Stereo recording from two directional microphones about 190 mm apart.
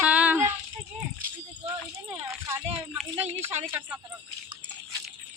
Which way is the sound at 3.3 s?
35° right (ahead or behind).